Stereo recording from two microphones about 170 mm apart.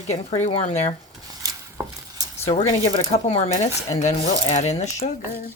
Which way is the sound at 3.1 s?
40° left (ahead or behind).